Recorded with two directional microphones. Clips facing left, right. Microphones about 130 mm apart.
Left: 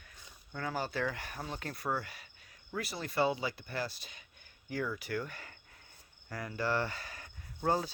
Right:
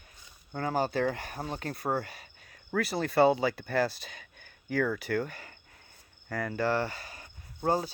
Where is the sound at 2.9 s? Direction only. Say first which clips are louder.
Right 8 dB; 65° right (ahead or behind); by 5.5 s 40° right (ahead or behind).